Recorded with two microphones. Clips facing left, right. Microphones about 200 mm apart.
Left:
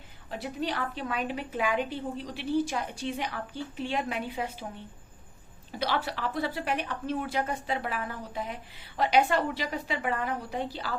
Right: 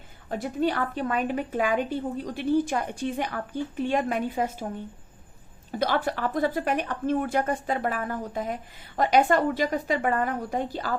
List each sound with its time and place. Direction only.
0.3 s a woman's voice: 50° right (ahead or behind)
5.8 s a woman's voice: 50° right (ahead or behind)